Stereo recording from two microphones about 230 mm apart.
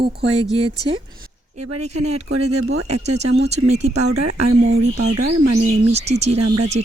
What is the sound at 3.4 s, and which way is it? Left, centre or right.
Speech, right.